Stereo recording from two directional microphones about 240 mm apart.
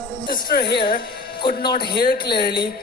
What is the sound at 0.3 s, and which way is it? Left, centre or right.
Speech, left.